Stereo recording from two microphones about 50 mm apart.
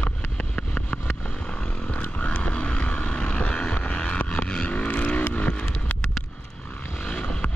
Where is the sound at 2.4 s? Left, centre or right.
Left.